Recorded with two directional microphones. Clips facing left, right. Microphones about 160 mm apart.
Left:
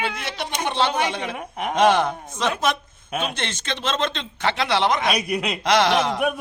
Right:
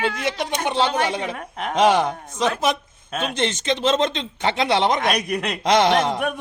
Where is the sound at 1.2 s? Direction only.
10° left (ahead or behind).